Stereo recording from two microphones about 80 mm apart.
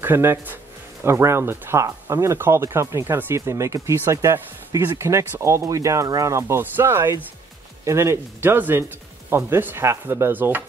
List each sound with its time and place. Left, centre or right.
0.0 s speech: right